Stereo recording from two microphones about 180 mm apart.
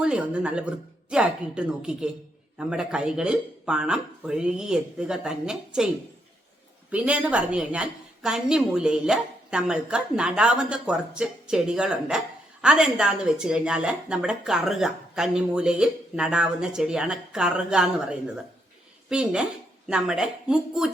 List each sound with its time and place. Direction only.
0.0 s a woman's voice: 5° right (ahead or behind)
6.9 s a woman's voice: 5° right (ahead or behind)